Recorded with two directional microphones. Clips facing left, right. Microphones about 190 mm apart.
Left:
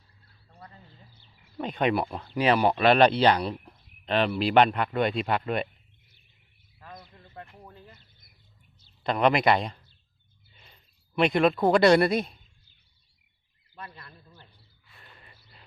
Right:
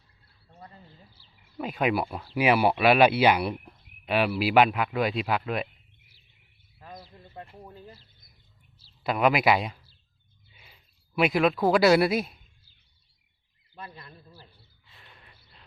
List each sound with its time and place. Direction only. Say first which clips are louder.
1.5 s speech: left 1 dB; 5° right (ahead or behind)
6.7 s bird: right 2 dB; 25° right (ahead or behind)
7.4 s speech: right 3 dB; 10° right (ahead or behind)
9.0 s speech: even; 5° right (ahead or behind)
13.8 s speech: right 1 dB; 15° right (ahead or behind)
14.9 s a sound: left 1 dB; centre (ahead or behind)